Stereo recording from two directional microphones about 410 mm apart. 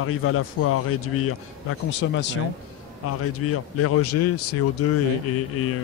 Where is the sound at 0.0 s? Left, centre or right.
Left.